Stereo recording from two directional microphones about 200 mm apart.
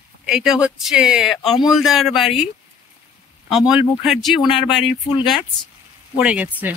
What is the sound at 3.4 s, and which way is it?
Speech, centre (ahead or behind).